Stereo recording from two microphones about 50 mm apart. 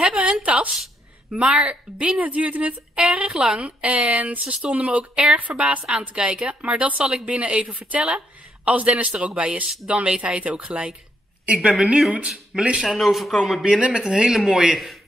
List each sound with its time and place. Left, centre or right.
0.0 s a sound: right
1.3 s speech: centre
3.0 s speech: centre
7.0 s speech: centre
7.2 s a woman's voice: right
12.8 s speech: centre
13.7 s speech: right
14.0 s speech: centre